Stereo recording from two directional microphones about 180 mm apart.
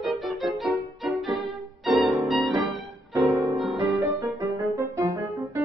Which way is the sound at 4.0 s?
15° right (ahead or behind).